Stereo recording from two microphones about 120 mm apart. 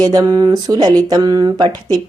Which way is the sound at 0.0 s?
30° right (ahead or behind).